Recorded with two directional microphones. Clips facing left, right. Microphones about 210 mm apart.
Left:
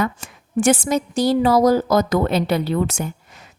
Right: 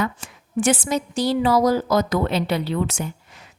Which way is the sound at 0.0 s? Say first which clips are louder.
Left 2 dB; 45° left (ahead or behind).